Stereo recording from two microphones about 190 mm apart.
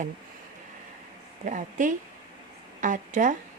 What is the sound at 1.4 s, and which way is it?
A woman's voice, 40° right (ahead or behind).